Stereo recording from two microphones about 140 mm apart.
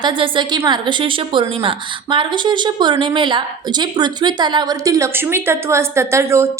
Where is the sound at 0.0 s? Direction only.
35° right (ahead or behind).